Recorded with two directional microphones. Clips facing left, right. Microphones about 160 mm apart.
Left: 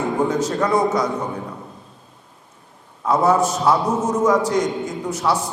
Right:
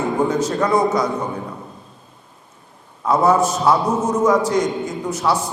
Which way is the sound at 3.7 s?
25° right (ahead or behind).